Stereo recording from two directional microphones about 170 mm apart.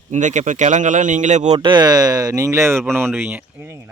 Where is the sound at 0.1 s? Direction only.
45° right (ahead or behind).